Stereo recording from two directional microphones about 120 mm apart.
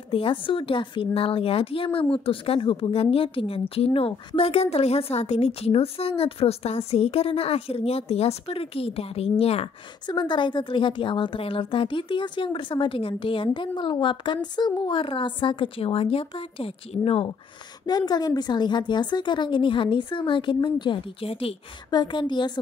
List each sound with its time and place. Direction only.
0.1 s a woman's voice: 45° left (ahead or behind)
10.0 s speech: 40° left (ahead or behind)
17.8 s a woman's voice: 35° left (ahead or behind); by 21.5 s 55° left (ahead or behind)
21.9 s a woman's voice: 40° left (ahead or behind)